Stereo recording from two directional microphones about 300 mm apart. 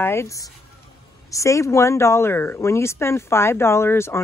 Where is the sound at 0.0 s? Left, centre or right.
Centre.